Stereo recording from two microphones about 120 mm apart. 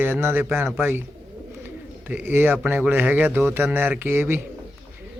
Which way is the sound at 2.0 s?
15° right (ahead or behind).